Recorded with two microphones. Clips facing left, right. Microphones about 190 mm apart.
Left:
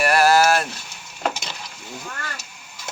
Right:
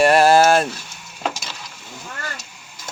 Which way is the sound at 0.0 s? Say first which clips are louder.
Right 4 dB; 25° right (ahead or behind).